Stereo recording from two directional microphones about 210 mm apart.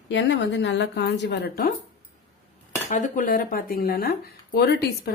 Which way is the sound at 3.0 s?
40° left (ahead or behind).